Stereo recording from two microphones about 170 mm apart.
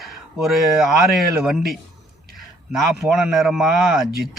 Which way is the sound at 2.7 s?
Centre (ahead or behind).